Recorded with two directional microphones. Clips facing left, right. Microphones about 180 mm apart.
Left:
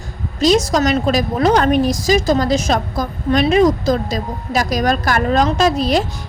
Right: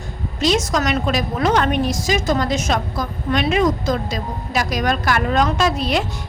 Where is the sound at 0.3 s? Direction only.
35° left (ahead or behind).